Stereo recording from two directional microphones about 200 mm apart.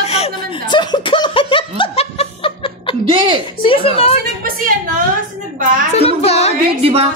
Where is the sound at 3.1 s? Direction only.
25° right (ahead or behind).